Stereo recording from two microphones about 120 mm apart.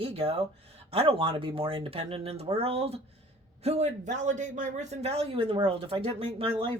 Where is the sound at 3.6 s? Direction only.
65° right (ahead or behind).